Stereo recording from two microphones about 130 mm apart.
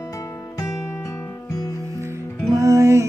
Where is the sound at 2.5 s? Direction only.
25° right (ahead or behind).